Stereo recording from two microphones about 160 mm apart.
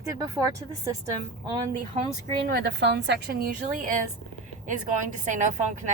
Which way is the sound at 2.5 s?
90° right.